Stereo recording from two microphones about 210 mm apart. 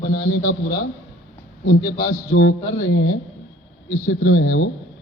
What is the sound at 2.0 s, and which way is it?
A man's voice, 80° left.